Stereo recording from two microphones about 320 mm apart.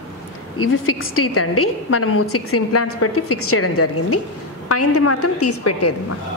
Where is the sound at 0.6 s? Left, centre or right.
Left.